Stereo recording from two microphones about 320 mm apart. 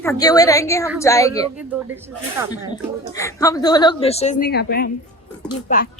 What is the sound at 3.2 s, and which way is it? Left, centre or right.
A woman's voice, centre.